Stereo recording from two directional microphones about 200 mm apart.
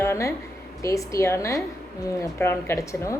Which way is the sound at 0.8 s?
15° left (ahead or behind).